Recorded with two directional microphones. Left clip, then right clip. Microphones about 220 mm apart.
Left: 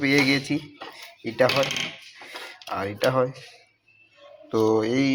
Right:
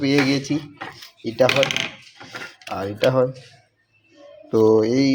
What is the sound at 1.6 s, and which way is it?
Speech, 35° right (ahead or behind).